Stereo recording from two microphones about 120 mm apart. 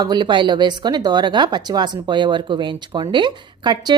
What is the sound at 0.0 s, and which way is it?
Speech, 40° right (ahead or behind).